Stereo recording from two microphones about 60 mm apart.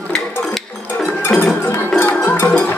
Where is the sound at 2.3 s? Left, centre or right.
Left.